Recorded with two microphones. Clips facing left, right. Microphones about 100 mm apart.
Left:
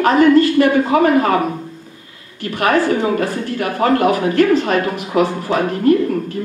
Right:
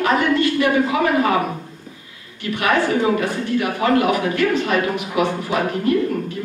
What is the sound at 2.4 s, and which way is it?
A woman's voice, 40° left (ahead or behind).